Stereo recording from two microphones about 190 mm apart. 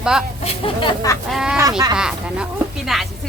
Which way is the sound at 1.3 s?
5° right (ahead or behind).